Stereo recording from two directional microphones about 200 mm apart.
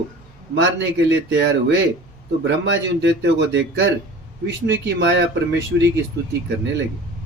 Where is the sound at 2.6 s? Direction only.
65° right (ahead or behind).